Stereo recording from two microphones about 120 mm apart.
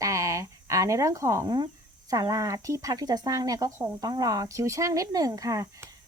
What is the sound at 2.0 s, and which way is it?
Speech, 30° right (ahead or behind).